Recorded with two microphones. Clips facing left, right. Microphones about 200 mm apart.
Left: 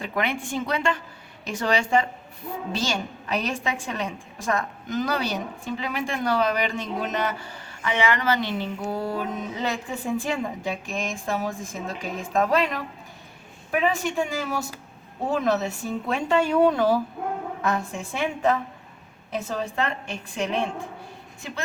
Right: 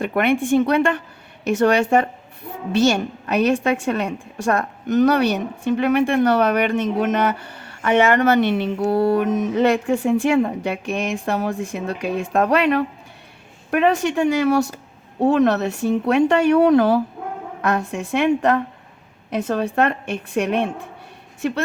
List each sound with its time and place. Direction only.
0.0 s a woman's voice: 65° right (ahead or behind)